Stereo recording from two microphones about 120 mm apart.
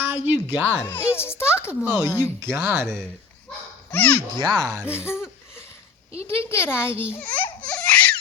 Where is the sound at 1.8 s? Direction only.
20° right (ahead or behind).